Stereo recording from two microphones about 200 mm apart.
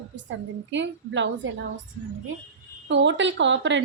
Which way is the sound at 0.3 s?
65° right (ahead or behind).